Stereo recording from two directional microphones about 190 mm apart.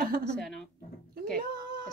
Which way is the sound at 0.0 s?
50° right (ahead or behind).